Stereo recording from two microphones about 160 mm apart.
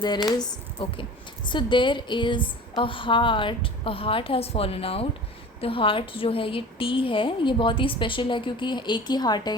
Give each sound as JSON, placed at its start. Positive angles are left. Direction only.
{"t": 0.0, "sound": "a woman's voice", "side_deg": 25}